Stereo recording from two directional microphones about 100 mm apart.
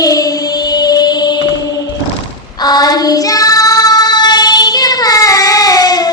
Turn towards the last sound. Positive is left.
turn(degrees=40)  # may be behind; listen again after turning